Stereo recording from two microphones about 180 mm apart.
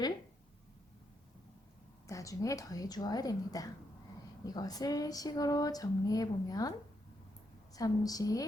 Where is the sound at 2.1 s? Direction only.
20° left (ahead or behind).